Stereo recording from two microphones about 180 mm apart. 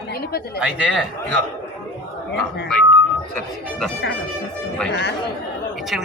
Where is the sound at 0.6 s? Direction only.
5° right (ahead or behind).